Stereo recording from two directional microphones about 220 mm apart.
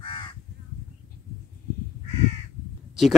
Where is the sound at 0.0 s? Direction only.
20° left (ahead or behind).